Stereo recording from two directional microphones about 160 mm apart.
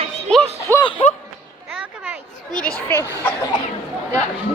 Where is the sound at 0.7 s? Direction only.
15° left (ahead or behind).